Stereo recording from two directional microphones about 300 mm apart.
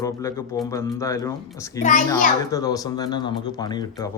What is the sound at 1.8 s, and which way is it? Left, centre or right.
Speech, left.